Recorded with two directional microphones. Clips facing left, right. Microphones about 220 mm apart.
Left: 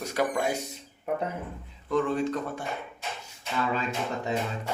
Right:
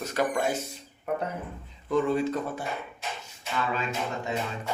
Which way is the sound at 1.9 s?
5° right (ahead or behind).